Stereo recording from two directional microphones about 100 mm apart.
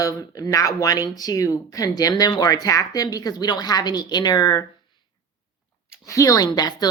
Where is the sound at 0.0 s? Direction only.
35° left (ahead or behind).